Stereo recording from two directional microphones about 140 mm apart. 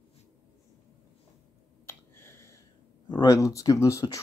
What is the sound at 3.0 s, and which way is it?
Speech, 25° left (ahead or behind).